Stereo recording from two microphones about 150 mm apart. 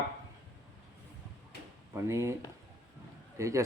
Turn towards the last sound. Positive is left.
turn(degrees=-20)  # may be behind; listen again after turning